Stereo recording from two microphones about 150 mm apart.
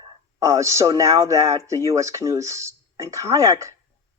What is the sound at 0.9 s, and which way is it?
Speech, 20° right (ahead or behind).